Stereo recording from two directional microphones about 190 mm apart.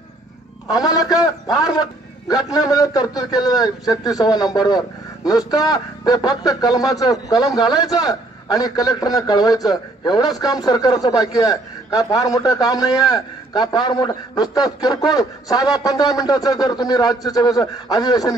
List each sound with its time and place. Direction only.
0.7 s a man's voice: 20° left (ahead or behind)